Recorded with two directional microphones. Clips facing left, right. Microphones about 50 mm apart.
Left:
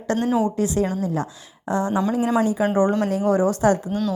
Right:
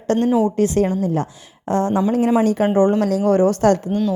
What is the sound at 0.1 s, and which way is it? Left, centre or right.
A woman's voice, right.